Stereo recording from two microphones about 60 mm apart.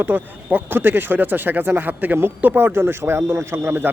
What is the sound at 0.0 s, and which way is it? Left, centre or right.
Speech, right.